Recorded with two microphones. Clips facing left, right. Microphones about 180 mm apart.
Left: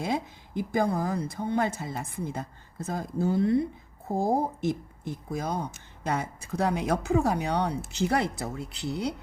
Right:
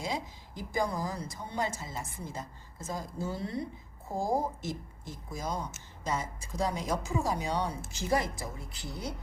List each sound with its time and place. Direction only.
0.0 s speech: 60° left (ahead or behind)